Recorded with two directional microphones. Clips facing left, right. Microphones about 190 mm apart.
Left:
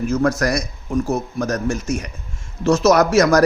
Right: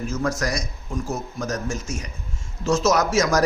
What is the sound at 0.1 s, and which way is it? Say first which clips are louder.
A man's voice: left 7 dB; 60° left (ahead or behind).